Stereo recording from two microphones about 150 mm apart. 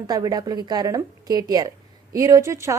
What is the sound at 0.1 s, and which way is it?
A woman's voice, 25° right (ahead or behind).